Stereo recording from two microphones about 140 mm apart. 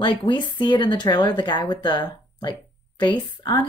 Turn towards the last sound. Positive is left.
turn(degrees=35)  # may be behind; listen again after turning